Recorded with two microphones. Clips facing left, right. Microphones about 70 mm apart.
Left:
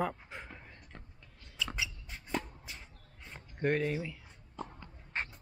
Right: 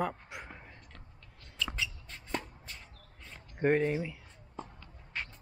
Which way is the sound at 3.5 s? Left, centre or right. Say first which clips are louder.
Right 4 dB; centre.